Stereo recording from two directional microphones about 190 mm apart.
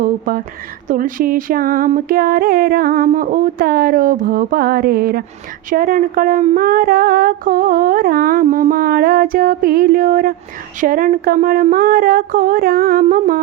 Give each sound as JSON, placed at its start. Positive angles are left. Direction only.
{"t": 0.0, "sound": "speech", "side_deg": -50}